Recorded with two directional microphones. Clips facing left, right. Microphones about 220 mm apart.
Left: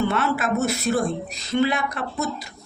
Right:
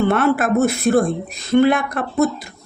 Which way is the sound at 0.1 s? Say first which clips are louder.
Right 7 dB; 55° right (ahead or behind).